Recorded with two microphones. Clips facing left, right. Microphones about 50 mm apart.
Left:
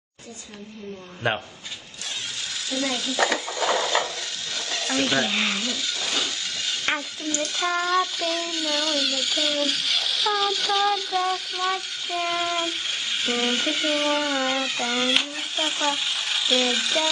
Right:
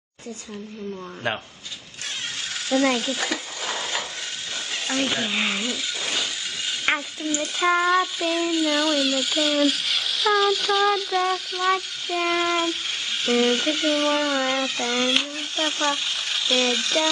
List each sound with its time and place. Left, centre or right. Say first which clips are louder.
1.2 s speech: left 2 dB; centre
2.7 s stir: right 7 dB; right
3.2 s a sound: left 5 dB; left
4.8 s speech: left 2 dB; centre
6.9 s child singing: right 4 dB; centre